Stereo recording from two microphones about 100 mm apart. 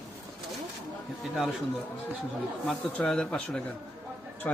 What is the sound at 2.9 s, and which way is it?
Speech, 10° left (ahead or behind).